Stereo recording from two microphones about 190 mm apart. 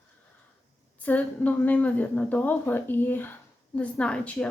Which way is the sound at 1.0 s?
10° left (ahead or behind).